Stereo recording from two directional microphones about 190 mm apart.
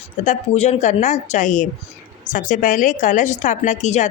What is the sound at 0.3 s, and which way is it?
Speech, 35° left (ahead or behind).